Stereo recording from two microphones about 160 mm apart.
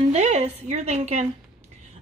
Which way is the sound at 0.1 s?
40° right (ahead or behind).